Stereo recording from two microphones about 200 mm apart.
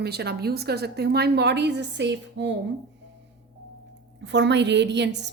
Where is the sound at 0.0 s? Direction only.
55° right (ahead or behind).